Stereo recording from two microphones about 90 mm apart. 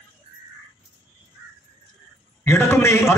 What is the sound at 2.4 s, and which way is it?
Speech, 30° left (ahead or behind).